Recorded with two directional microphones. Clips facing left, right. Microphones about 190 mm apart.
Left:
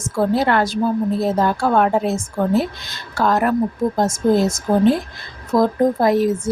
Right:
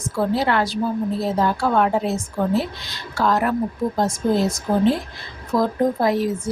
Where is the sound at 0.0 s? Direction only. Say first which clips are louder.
Left 3 dB; 50° left (ahead or behind).